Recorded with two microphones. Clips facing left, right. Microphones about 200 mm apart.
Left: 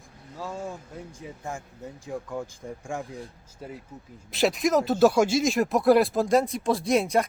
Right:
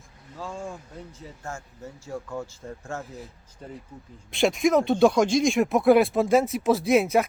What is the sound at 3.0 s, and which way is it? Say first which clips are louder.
Speech: left 2 dB; centre (ahead or behind).